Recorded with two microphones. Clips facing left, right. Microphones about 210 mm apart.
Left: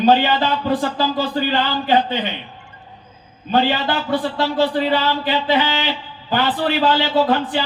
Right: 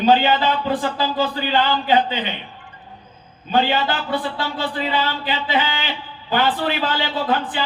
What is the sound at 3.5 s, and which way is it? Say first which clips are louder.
Speech: left 1 dB; 45° left (ahead or behind).